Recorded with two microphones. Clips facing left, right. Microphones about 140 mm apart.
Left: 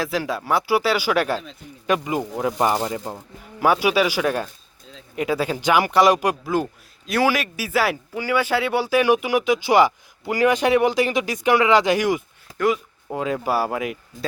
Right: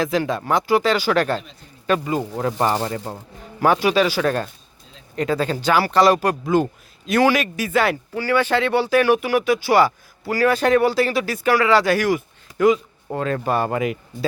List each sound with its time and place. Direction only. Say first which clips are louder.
0.0 s speech: right 3 dB; 5° left (ahead or behind)
6.4 s speech: right 4 dB; centre (ahead or behind); by 12.2 s 20° left (ahead or behind)
12.5 s speech: right 5 dB; centre (ahead or behind)